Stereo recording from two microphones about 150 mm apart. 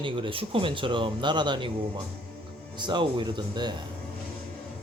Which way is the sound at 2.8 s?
30° right (ahead or behind).